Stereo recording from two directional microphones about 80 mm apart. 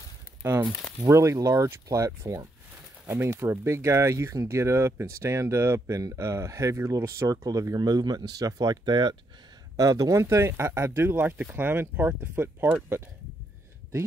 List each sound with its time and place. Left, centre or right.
1.0 s speech: right
3.1 s speech: right
9.8 s speech: right
10.2 s speech: right